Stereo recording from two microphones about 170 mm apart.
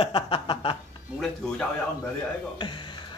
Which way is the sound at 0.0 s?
30° left (ahead or behind).